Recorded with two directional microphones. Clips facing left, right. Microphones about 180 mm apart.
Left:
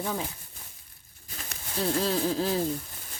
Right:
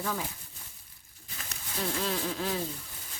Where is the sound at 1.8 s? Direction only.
35° left (ahead or behind).